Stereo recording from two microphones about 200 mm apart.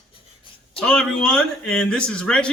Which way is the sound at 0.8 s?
5° left (ahead or behind).